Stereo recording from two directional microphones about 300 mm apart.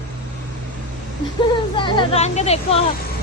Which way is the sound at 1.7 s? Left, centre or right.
Centre.